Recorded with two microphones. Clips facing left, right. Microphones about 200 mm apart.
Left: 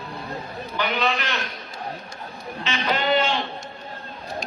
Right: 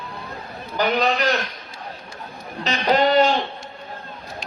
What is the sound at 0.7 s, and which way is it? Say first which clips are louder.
Speech: right 5 dB; 40° right (ahead or behind).